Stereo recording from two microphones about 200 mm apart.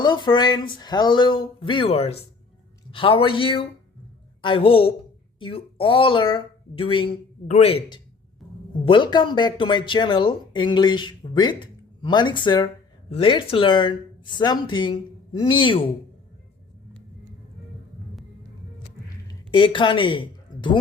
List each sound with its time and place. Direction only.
0.0 s a woman's voice: 25° left (ahead or behind)
19.3 s speech: 25° left (ahead or behind)